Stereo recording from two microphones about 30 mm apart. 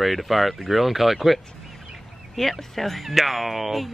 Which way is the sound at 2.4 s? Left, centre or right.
Centre.